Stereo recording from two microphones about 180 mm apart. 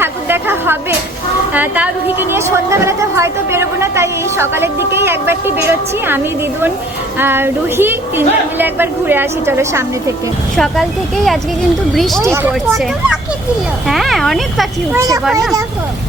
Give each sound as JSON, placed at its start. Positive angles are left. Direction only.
{"t": 0.0, "sound": "a sound", "side_deg": -10}
{"t": 1.5, "sound": "a woman's voice", "side_deg": -10}
{"t": 7.2, "sound": "a woman's voice", "side_deg": -10}
{"t": 10.6, "sound": "speech", "side_deg": 0}
{"t": 12.2, "sound": "a woman's voice", "side_deg": -10}
{"t": 14.9, "sound": "speech", "side_deg": -20}